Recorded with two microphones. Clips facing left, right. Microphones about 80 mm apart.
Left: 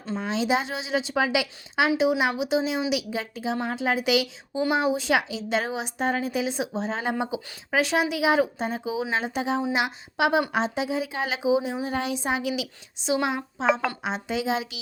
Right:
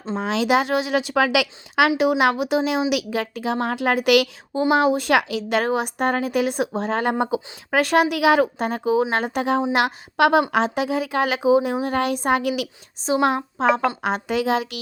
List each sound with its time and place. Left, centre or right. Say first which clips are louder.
0.2 s a woman's voice: right 6 dB; right
2.0 s a woman's voice: right 4 dB; right
8.1 s a woman's voice: right 5 dB; right
13.0 s a woman's voice: right 4 dB; right
13.2 s a woman's voice: right 7 dB; right